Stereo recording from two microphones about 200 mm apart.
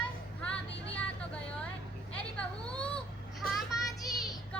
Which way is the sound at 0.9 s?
5° left (ahead or behind).